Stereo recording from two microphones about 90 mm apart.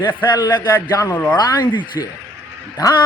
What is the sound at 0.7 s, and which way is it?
Speech, 40° left (ahead or behind).